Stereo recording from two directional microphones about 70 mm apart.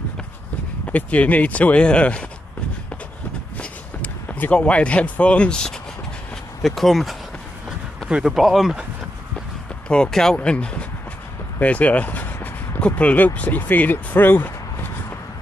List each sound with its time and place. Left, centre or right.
0.8 s speech: centre
3.5 s a sound: left
6.6 s speech: centre
9.8 s speech: centre; by 14.9 s left